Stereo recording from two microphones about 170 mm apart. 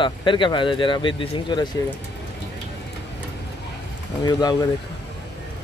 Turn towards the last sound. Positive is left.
turn(degrees=25)  # may be behind; listen again after turning